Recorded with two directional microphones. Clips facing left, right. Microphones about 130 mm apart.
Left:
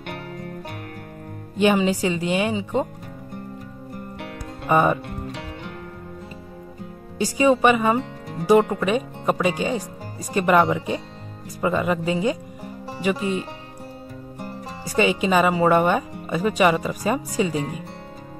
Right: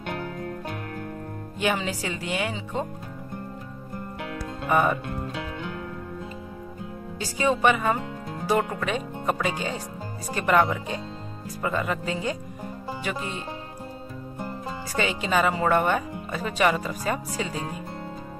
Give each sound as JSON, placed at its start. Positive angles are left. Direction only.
{"t": 1.6, "sound": "speech", "side_deg": 20}
{"t": 4.6, "sound": "speech", "side_deg": 20}
{"t": 7.2, "sound": "speech", "side_deg": 15}
{"t": 15.0, "sound": "speech", "side_deg": 15}